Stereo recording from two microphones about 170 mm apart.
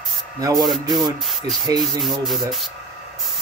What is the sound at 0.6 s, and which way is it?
Speech, centre (ahead or behind).